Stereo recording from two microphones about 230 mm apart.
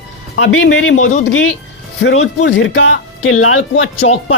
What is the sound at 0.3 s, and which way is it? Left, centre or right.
Speech, left.